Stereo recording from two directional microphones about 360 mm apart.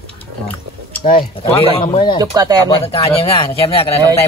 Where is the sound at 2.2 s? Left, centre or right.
Centre.